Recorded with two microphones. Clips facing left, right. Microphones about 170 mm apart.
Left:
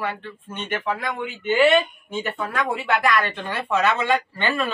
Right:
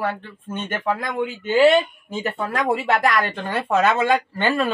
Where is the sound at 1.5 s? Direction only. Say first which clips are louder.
Right 2 dB; 35° right (ahead or behind).